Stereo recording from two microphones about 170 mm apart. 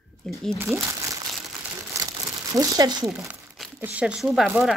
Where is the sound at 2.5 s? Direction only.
20° right (ahead or behind).